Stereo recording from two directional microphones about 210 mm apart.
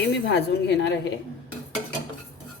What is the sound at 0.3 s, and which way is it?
Speech, 55° left (ahead or behind).